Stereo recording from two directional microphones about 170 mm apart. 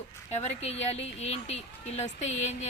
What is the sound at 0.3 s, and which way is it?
A woman's voice, 40° left (ahead or behind).